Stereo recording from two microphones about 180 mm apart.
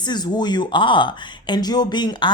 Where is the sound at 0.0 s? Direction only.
25° left (ahead or behind).